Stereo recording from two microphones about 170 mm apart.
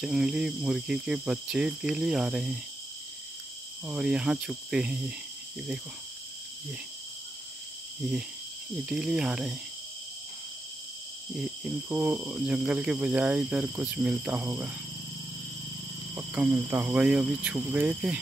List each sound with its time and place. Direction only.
0.0 s cricket: 5° right (ahead or behind)
3.8 s cricket: 5° right (ahead or behind)
8.8 s cricket: 5° right (ahead or behind)
11.3 s speech: 5° right (ahead or behind)
16.2 s speech: 10° right (ahead or behind)